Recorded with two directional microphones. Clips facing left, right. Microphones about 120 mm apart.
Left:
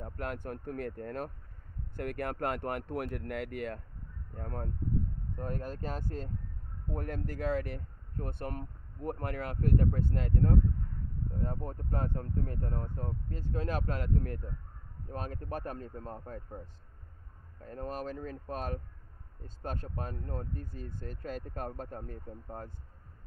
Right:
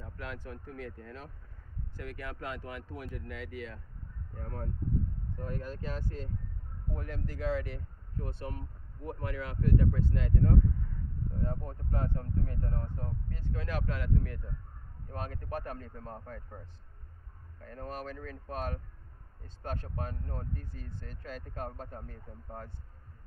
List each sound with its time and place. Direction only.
0.0 s speech: 50° left (ahead or behind)
4.4 s speech: 45° left (ahead or behind)
17.6 s speech: 35° left (ahead or behind)